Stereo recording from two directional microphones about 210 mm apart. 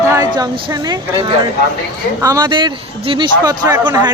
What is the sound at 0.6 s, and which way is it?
Speech, 20° right (ahead or behind).